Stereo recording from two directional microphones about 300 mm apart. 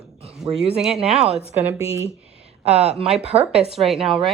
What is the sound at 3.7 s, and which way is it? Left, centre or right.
Speech, centre.